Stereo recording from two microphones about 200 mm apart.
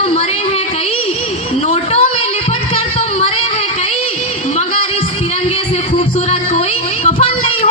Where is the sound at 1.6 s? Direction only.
30° left (ahead or behind).